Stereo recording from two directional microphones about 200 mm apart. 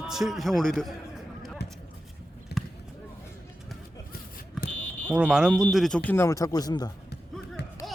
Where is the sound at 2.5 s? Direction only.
55° left (ahead or behind).